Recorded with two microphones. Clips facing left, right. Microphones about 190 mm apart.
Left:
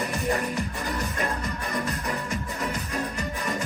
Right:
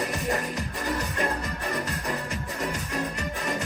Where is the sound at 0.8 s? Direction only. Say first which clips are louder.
Right 1 dB; 35° right (ahead or behind).